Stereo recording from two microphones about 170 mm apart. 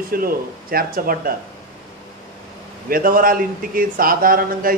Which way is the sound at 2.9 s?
55° right (ahead or behind).